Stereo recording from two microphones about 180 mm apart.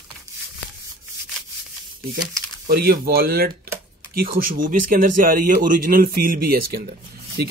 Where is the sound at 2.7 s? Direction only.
55° right (ahead or behind).